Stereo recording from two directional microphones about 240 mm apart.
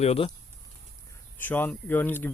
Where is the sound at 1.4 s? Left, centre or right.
Centre.